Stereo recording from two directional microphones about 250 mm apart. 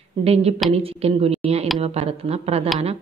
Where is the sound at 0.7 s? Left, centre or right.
Right.